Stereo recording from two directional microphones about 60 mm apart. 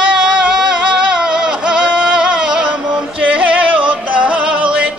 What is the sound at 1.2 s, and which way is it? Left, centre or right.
Music, centre.